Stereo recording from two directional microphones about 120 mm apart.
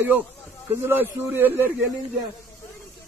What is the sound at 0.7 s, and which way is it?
A man's voice, 15° right (ahead or behind).